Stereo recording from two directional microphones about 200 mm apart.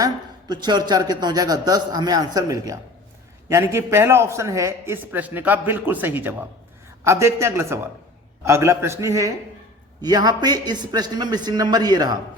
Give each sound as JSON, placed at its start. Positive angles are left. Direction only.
{"t": 0.0, "sound": "a man's voice", "side_deg": -20}